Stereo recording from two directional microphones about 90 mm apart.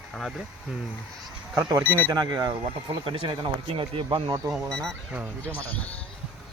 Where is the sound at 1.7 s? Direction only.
25° right (ahead or behind).